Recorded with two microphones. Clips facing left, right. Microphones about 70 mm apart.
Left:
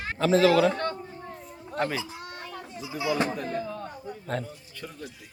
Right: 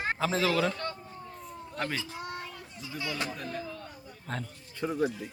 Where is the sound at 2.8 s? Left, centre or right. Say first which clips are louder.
Left 8 dB; centre.